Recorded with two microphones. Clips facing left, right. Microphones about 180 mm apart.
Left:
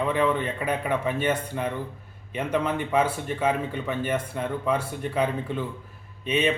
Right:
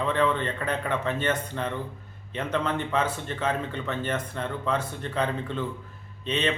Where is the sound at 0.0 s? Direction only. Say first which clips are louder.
Left 1 dB; 10° left (ahead or behind).